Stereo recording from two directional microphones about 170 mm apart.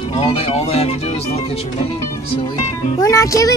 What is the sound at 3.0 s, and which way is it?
Speech, 20° left (ahead or behind).